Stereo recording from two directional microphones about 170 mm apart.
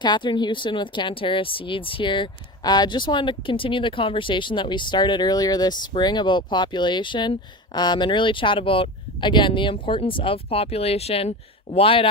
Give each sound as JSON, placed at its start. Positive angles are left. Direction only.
{"t": 0.0, "sound": "speech", "side_deg": 25}